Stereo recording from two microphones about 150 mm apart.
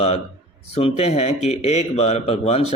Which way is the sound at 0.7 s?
40° left (ahead or behind).